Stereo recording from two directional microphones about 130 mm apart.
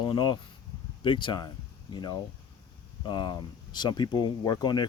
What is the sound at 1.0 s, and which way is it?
Speech, 40° left (ahead or behind).